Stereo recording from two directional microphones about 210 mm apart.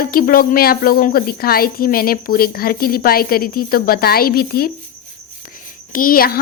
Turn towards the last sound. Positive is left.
turn(degrees=45)  # may be behind; listen again after turning